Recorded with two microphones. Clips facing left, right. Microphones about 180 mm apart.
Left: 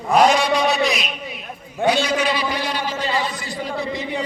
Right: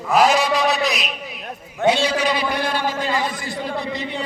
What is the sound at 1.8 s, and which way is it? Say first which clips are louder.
Speech: right 1 dB; 25° right (ahead or behind).